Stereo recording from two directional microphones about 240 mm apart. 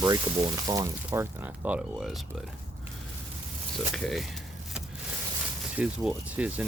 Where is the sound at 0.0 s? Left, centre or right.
Centre.